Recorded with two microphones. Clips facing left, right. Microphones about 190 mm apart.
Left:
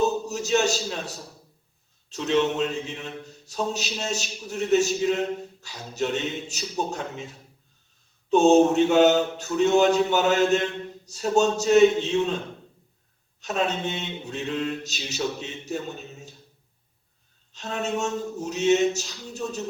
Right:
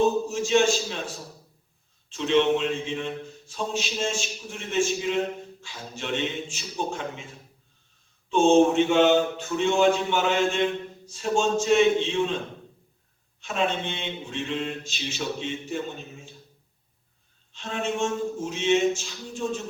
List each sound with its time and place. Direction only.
0.3 s a man's voice: 40° left (ahead or behind)
8.3 s a man's voice: 40° left (ahead or behind)
13.4 s a man's voice: 40° left (ahead or behind)
17.5 s a man's voice: 40° left (ahead or behind)